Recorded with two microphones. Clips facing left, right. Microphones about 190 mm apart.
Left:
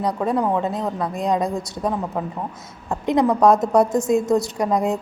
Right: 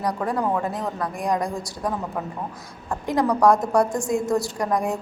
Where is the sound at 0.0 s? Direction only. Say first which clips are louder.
Left 3 dB; 20° left (ahead or behind).